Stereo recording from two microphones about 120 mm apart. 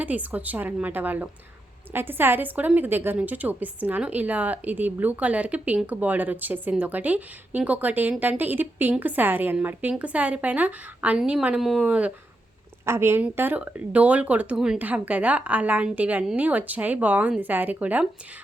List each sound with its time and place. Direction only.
0.0 s a woman's voice: 15° right (ahead or behind)
12.8 s a woman's voice: 20° right (ahead or behind)